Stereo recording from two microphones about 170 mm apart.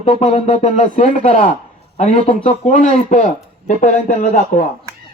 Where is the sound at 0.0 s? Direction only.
40° left (ahead or behind).